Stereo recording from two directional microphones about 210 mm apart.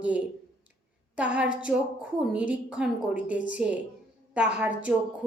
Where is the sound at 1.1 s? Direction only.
5° right (ahead or behind).